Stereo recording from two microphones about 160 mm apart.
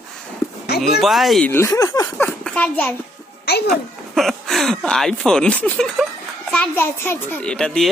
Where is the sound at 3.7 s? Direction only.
Centre (ahead or behind).